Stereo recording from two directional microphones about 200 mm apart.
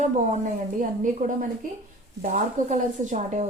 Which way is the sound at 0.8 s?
40° right (ahead or behind).